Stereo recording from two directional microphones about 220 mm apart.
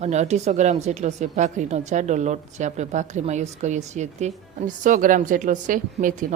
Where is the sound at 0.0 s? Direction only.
30° right (ahead or behind).